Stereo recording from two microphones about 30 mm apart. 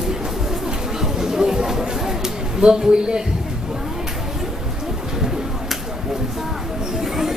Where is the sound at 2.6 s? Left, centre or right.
Right.